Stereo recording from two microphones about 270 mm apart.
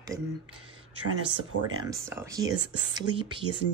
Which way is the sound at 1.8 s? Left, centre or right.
Centre.